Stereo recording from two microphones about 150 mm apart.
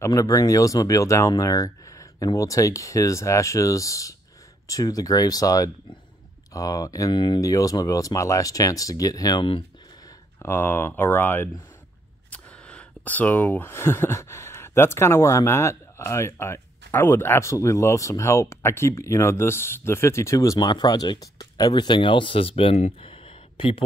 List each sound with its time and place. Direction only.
0.0 s speech: 20° left (ahead or behind); by 23.8 s 35° left (ahead or behind)